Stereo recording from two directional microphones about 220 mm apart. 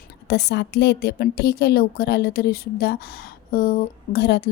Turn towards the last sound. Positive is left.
turn(degrees=50)  # may be behind; listen again after turning